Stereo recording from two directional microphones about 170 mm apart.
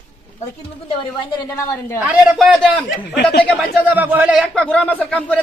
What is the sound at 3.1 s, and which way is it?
Speech, 75° left (ahead or behind).